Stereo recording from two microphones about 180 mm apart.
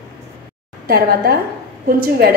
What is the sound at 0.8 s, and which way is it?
A woman's voice, 60° right (ahead or behind).